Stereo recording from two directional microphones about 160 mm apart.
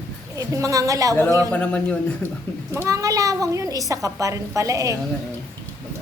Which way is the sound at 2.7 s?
20° right (ahead or behind).